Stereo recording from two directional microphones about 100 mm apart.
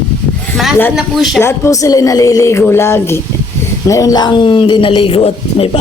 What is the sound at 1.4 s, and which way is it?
Speech, 30° left (ahead or behind).